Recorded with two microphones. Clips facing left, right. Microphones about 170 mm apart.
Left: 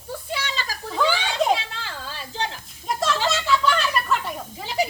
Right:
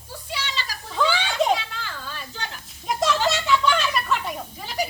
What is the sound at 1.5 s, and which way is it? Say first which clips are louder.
Children playing: even; 30° left (ahead or behind).